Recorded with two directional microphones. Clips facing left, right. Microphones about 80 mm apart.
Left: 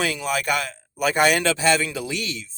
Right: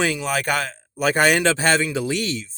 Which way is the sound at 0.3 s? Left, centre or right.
Right.